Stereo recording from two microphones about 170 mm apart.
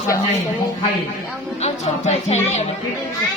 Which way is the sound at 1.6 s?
40° left (ahead or behind).